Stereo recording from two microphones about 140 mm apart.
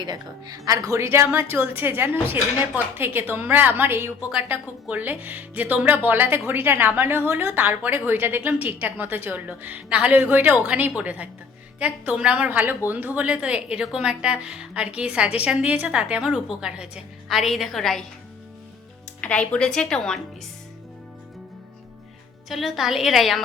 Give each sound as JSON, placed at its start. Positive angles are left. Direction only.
{"t": 0.0, "sound": "a woman's voice", "side_deg": -30}
{"t": 19.2, "sound": "speech", "side_deg": 10}
{"t": 22.4, "sound": "a woman's voice", "side_deg": 0}